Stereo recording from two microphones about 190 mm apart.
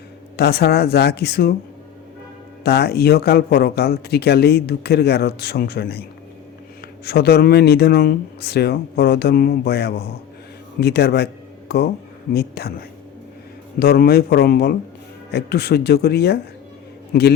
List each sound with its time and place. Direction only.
0.3 s speech: 60° left (ahead or behind)
2.6 s speech: 55° left (ahead or behind)
13.7 s a man's voice: 55° left (ahead or behind)